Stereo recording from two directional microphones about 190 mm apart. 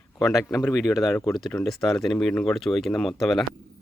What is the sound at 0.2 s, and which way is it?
Speech, centre (ahead or behind).